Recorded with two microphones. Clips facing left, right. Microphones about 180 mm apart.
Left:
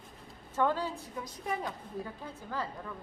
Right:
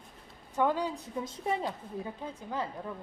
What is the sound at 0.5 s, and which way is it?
A woman's voice, 15° right (ahead or behind).